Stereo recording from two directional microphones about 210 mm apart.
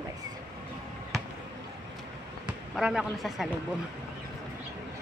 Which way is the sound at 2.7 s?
Centre (ahead or behind).